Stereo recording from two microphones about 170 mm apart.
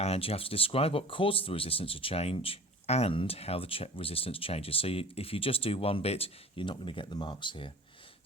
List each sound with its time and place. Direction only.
0.0 s speech: 35° left (ahead or behind)